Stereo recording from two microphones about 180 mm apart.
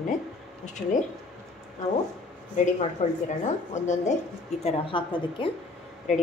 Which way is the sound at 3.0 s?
40° left (ahead or behind).